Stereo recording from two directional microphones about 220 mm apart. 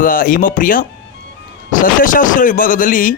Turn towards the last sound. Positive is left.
turn(degrees=40)  # may be behind; listen again after turning